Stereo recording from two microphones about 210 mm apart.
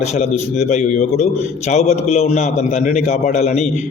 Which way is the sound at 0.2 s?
35° left (ahead or behind).